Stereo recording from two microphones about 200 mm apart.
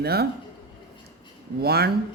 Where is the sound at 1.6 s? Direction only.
50° right (ahead or behind).